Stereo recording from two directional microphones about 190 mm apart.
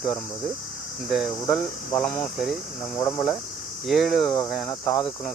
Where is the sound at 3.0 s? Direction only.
15° left (ahead or behind).